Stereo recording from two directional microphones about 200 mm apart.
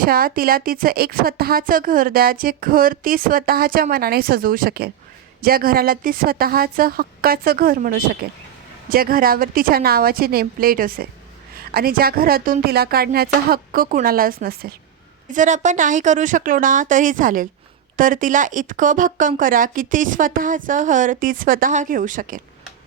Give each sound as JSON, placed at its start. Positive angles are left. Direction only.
{"t": 0.0, "sound": "a woman's voice", "side_deg": -45}